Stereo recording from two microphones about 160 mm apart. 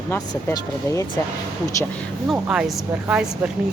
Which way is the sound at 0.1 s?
20° left (ahead or behind).